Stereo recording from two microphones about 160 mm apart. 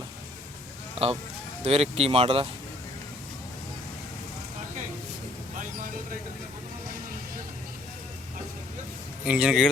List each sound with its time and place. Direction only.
1.0 s speech: 35° right (ahead or behind)
5.5 s vehicle: 60° right (ahead or behind)
9.2 s speech: 5° right (ahead or behind)